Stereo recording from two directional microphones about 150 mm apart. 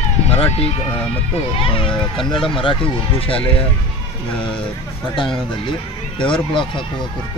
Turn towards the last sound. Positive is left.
turn(degrees=35)  # may be behind; listen again after turning